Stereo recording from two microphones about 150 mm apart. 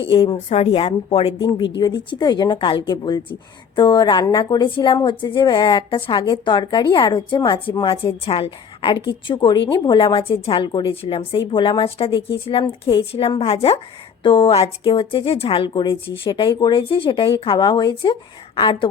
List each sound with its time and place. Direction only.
0.0 s speech: 35° left (ahead or behind)